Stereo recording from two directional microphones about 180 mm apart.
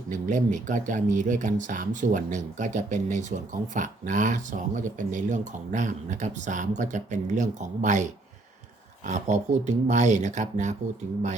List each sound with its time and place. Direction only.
0.1 s speech: 45° right (ahead or behind)